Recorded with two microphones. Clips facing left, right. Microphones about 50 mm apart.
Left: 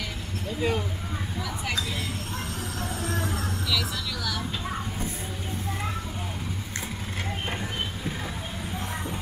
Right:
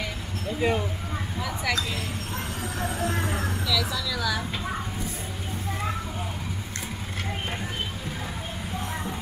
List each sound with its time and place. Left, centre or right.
0.6 s speech: centre
2.8 s train: right